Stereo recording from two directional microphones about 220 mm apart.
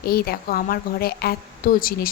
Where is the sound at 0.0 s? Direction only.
45° left (ahead or behind).